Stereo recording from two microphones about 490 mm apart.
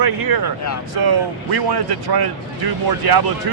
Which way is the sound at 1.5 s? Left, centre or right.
Right.